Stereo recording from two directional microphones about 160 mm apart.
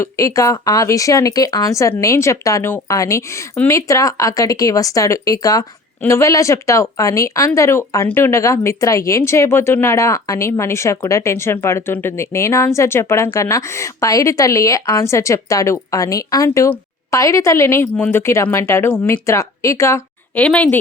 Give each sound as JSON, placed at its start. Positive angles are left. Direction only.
{"t": 0.0, "sound": "speech", "side_deg": 20}
{"t": 20.4, "sound": "speech", "side_deg": 5}